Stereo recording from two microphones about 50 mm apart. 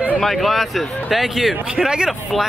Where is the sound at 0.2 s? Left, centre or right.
Centre.